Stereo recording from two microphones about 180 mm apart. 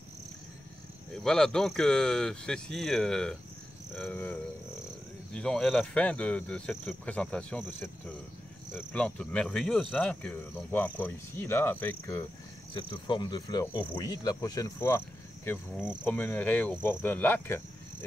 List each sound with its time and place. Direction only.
1.1 s cricket: 5° left (ahead or behind)
3.9 s speech: 5° left (ahead or behind)
5.3 s cricket: 5° left (ahead or behind)
8.7 s speech: 5° left (ahead or behind)
12.7 s speech: 25° left (ahead or behind); by 17.6 s 10° left (ahead or behind)